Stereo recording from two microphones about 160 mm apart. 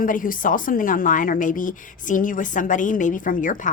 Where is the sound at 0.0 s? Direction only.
60° left (ahead or behind).